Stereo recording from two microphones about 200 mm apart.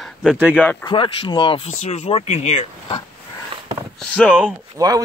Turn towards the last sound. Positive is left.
turn(degrees=-15)  # may be behind; listen again after turning